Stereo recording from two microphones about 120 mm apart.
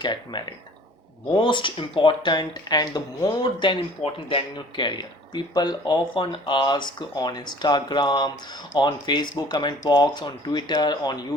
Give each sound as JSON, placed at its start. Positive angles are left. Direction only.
{"t": 0.0, "sound": "speech", "side_deg": 40}
{"t": 3.4, "sound": "speech", "side_deg": 45}